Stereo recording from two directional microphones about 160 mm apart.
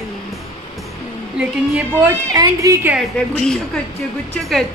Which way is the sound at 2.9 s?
5° left (ahead or behind).